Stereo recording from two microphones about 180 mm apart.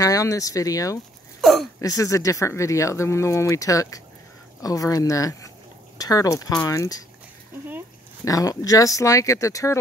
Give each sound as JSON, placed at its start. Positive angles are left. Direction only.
{"t": 0.0, "sound": "speech", "side_deg": 20}
{"t": 1.4, "sound": "a sound", "side_deg": 0}
{"t": 1.8, "sound": "speech", "side_deg": 20}
{"t": 8.3, "sound": "speech", "side_deg": 20}